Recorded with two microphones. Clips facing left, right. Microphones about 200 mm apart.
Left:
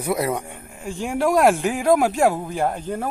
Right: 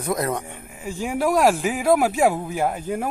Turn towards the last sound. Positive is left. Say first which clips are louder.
# even
turn(degrees=-10)  # may be behind; listen again after turning